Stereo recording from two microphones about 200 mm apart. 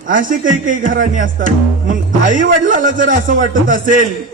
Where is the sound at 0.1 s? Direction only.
40° right (ahead or behind).